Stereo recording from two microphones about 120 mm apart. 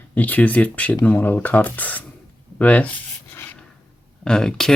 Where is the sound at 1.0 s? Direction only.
15° left (ahead or behind).